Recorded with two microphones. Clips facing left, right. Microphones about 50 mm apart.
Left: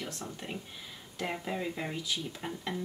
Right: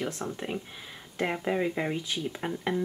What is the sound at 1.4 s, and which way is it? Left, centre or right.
Speech, right.